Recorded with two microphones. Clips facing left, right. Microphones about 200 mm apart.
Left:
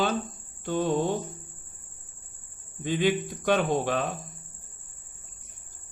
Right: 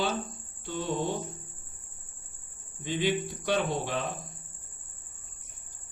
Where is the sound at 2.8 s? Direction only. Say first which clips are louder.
Left 4 dB; 50° left (ahead or behind).